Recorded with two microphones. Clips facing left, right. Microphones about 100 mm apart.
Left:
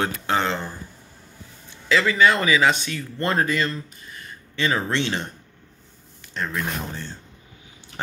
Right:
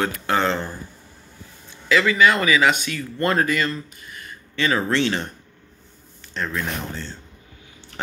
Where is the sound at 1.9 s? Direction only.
30° left (ahead or behind).